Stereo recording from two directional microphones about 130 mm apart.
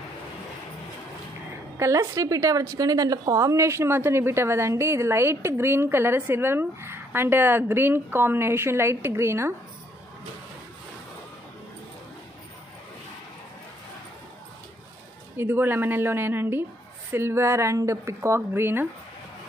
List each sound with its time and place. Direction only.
1.8 s a woman's voice: 25° right (ahead or behind)
15.3 s a woman's voice: 15° right (ahead or behind)